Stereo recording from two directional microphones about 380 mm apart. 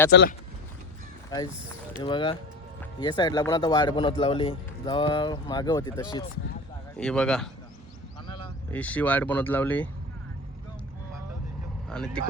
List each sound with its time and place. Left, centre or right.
0.1 s speech: left
1.3 s speech: centre
11.9 s speech: centre